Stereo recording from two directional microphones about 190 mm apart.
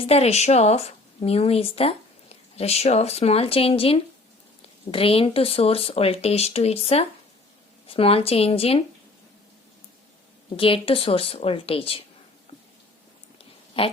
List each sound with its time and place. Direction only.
0.0 s speech: 35° left (ahead or behind)
10.6 s a woman's voice: 30° left (ahead or behind)
13.4 s dog: 30° left (ahead or behind)